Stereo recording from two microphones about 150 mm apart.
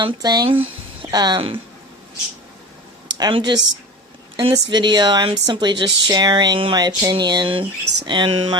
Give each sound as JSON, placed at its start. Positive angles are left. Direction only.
{"t": 0.0, "sound": "speech", "side_deg": -25}
{"t": 3.2, "sound": "speech", "side_deg": -30}